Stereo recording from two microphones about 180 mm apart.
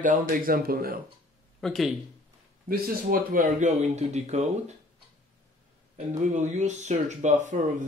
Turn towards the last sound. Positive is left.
turn(degrees=-45)  # may be behind; listen again after turning